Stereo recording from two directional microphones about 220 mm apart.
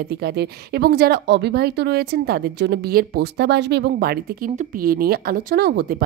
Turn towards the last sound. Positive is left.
turn(degrees=-45)  # may be behind; listen again after turning